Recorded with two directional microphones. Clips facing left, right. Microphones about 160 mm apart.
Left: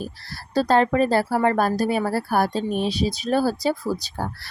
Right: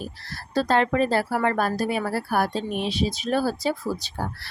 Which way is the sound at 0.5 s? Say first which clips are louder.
Left 3 dB; 35° left (ahead or behind).